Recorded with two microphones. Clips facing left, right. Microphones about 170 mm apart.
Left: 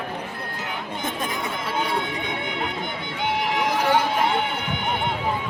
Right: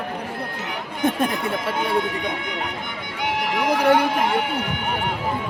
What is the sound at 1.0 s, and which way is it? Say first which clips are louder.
Speech: right 9 dB; 60° right (ahead or behind).